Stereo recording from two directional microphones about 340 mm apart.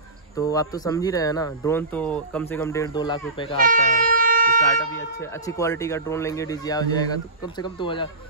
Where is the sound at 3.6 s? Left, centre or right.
Right.